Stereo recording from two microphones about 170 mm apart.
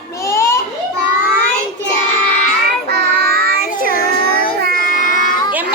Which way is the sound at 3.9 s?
60° left (ahead or behind).